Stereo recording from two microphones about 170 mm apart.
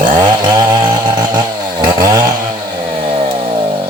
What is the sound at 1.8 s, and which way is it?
Chainsaw, 20° right (ahead or behind).